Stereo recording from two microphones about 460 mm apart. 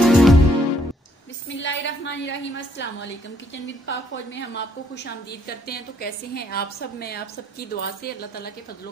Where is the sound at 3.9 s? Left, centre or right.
Left.